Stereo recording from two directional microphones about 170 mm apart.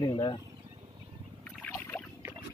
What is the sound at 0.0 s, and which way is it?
Speech, 25° left (ahead or behind).